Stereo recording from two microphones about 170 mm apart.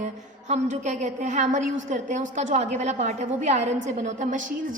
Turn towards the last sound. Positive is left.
turn(degrees=-50)  # may be behind; listen again after turning